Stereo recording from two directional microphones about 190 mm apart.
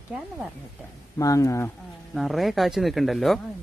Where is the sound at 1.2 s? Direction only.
15° left (ahead or behind).